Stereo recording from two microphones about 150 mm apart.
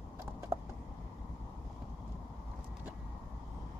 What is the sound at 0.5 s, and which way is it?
Typing, 15° right (ahead or behind).